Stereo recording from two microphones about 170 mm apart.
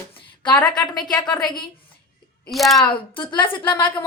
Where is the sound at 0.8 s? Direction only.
25° left (ahead or behind).